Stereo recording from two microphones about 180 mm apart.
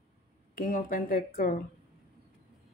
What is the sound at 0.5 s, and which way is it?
A woman's voice, 50° left (ahead or behind).